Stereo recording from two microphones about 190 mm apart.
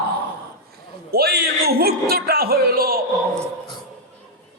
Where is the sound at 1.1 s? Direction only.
55° right (ahead or behind).